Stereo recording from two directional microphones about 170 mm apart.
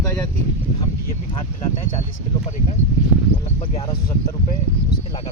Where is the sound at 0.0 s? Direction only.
15° left (ahead or behind).